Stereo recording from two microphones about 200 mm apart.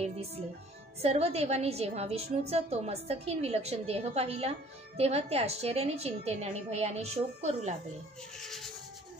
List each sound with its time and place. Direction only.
0.0 s a woman's voice: 30° right (ahead or behind)
8.4 s rub: centre (ahead or behind)